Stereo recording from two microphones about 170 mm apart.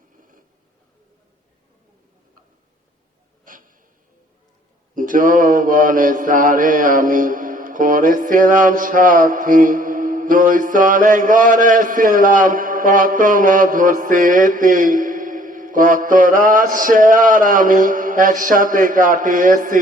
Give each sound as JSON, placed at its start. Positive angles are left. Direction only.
{"t": 3.4, "sound": "snort", "side_deg": -50}
{"t": 4.9, "sound": "mantra", "side_deg": -50}